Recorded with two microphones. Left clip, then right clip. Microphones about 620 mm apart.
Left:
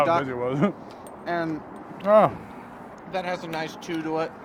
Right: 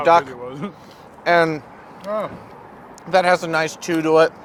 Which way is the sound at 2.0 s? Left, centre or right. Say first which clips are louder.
Left 8 dB; left.